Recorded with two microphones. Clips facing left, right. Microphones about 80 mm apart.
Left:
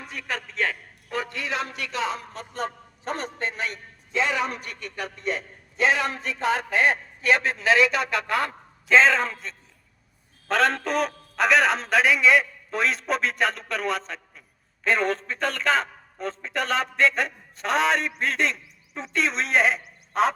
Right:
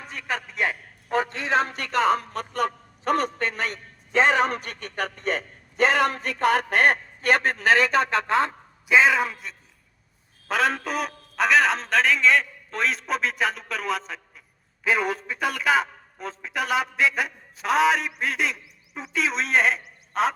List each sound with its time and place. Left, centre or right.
0.1 s a man's voice: centre
1.1 s a man's voice: right
8.9 s a man's voice: centre